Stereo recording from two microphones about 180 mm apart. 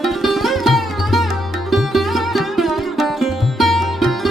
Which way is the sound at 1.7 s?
Centre (ahead or behind).